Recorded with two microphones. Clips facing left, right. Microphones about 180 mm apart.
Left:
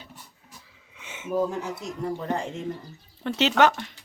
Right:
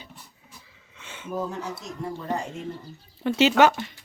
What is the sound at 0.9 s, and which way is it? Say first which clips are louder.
Speech: left 5 dB; 15° left (ahead or behind).